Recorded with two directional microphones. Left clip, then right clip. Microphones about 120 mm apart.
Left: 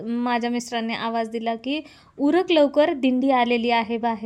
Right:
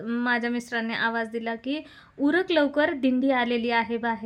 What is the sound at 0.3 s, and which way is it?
A woman's voice, 40° left (ahead or behind).